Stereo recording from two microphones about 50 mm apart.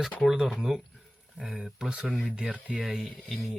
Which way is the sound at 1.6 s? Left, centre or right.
Centre.